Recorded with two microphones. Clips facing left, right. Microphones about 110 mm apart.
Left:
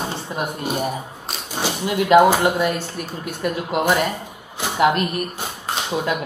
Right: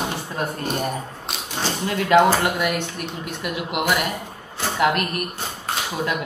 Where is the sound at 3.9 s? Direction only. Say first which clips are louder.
Left 3 dB; 30° left (ahead or behind).